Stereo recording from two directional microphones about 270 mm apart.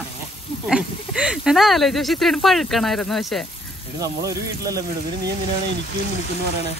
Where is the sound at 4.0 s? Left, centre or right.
Centre.